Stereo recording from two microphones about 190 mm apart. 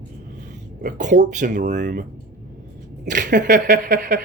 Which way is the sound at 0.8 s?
45° right (ahead or behind).